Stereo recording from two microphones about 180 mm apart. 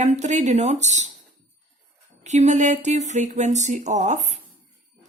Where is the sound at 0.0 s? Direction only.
40° right (ahead or behind).